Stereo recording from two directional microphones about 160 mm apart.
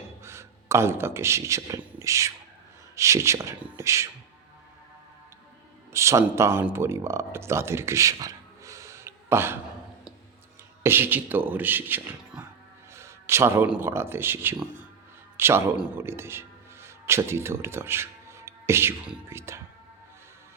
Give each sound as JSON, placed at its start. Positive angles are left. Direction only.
{"t": 0.2, "sound": "speech", "side_deg": -15}
{"t": 5.9, "sound": "speech", "side_deg": -20}
{"t": 10.8, "sound": "speech", "side_deg": -15}